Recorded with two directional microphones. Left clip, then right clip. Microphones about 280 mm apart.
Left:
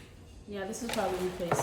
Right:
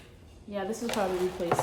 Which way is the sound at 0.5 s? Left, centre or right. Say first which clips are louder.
Right 3 dB; right.